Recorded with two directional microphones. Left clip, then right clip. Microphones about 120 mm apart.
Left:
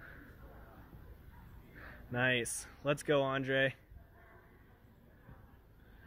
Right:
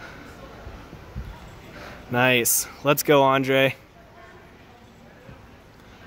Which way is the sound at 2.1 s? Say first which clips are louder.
Right 13 dB; 30° right (ahead or behind).